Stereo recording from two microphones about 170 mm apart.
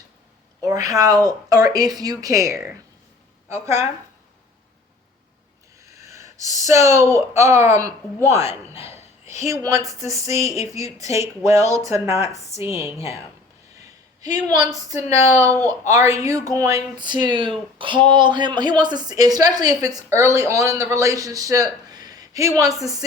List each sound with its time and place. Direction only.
0.6 s speech: 20° right (ahead or behind)
5.8 s speech: 15° right (ahead or behind)
9.0 s a sound: 40° left (ahead or behind)
9.4 s speech: 20° right (ahead or behind)
10.3 s a sound: 40° left (ahead or behind)
10.7 s speech: 20° right (ahead or behind)